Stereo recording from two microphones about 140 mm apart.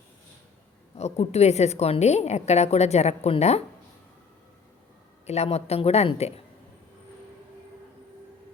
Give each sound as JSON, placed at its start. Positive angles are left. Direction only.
{"t": 0.9, "sound": "a woman's voice", "side_deg": 50}
{"t": 5.2, "sound": "a woman's voice", "side_deg": 50}